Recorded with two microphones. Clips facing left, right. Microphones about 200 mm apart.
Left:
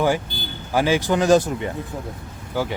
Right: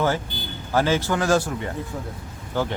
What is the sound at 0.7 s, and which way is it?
Speech, 15° left (ahead or behind).